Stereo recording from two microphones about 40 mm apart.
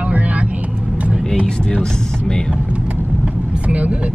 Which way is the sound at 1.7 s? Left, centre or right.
Left.